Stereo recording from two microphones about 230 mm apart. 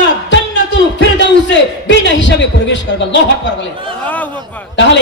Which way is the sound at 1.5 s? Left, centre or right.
Left.